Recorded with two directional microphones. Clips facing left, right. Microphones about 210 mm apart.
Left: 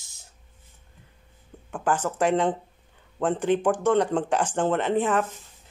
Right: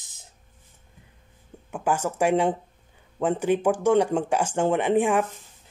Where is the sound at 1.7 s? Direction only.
10° right (ahead or behind).